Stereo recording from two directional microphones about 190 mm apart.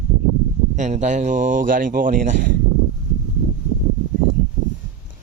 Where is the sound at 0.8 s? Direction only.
40° right (ahead or behind).